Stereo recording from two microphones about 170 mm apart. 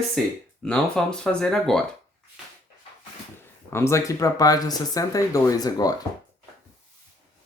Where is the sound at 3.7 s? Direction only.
15° left (ahead or behind).